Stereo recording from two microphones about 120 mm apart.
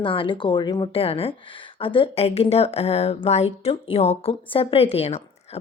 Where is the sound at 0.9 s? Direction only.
50° left (ahead or behind).